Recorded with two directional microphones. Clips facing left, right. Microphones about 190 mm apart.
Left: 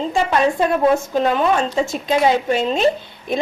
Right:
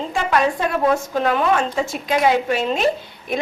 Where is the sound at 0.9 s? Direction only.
25° left (ahead or behind).